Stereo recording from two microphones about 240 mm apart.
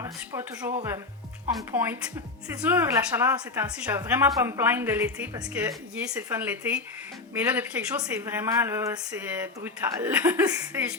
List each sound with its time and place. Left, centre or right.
0.0 s a woman's voice: centre